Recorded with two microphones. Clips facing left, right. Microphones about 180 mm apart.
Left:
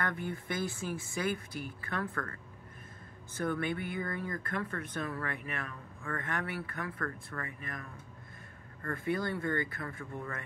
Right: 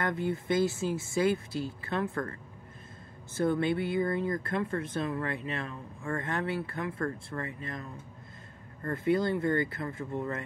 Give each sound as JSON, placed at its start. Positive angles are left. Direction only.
{"t": 0.0, "sound": "speech", "side_deg": -25}
{"t": 3.3, "sound": "speech", "side_deg": -25}